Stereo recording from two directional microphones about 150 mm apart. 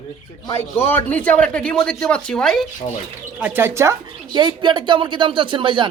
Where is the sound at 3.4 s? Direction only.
15° right (ahead or behind).